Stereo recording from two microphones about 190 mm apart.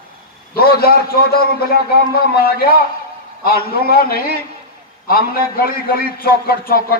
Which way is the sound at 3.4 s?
50° left (ahead or behind).